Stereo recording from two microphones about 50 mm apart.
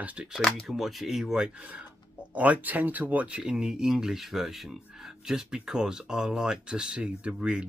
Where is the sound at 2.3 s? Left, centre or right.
Right.